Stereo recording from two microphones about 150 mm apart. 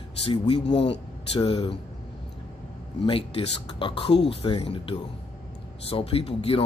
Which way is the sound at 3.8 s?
35° left (ahead or behind).